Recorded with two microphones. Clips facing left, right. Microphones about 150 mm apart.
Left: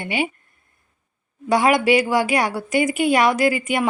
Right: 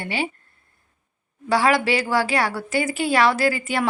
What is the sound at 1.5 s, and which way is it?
A woman's voice, 20° left (ahead or behind).